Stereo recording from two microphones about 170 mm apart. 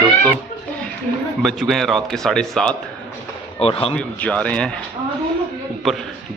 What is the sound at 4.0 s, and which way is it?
Speech, 5° left (ahead or behind).